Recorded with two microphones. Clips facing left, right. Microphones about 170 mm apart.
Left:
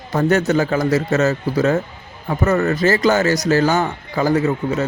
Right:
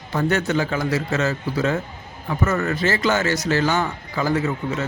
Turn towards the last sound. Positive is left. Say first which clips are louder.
# left 5 dB
turn(degrees=40)  # may be behind; listen again after turning